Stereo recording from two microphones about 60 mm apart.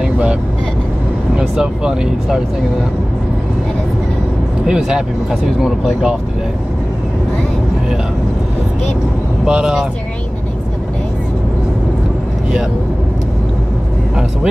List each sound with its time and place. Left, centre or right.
0.0 s vehicle: centre
1.3 s speech: centre
4.6 s speech: centre
9.5 s speech: centre